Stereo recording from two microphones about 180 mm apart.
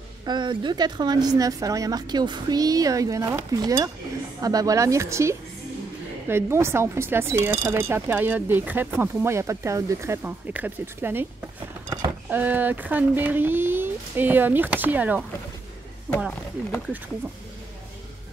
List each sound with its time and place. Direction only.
0.2 s a woman's voice: 25° right (ahead or behind)
12.3 s speech: 10° right (ahead or behind)
16.2 s speech: centre (ahead or behind)